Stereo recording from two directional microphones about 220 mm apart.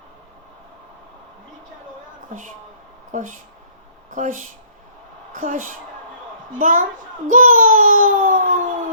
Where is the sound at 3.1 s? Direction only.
35° right (ahead or behind).